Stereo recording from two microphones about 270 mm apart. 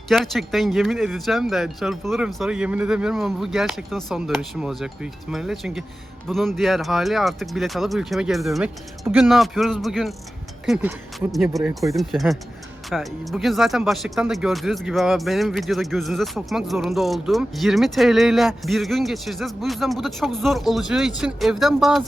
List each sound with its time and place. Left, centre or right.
0.1 s speech: centre